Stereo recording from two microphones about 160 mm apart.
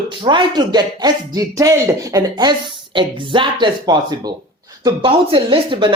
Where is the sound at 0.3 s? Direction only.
25° right (ahead or behind).